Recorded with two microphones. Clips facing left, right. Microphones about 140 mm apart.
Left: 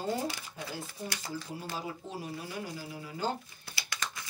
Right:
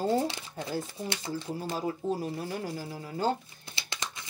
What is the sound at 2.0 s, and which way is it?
Speech, 40° right (ahead or behind).